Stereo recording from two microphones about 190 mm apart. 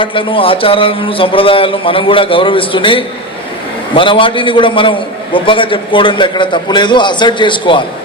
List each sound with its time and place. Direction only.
0.0 s a man's voice: 25° left (ahead or behind)